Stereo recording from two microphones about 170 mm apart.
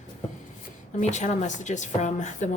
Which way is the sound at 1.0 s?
45° left (ahead or behind).